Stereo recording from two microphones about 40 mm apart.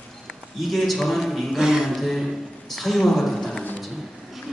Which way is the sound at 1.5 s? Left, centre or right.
Centre.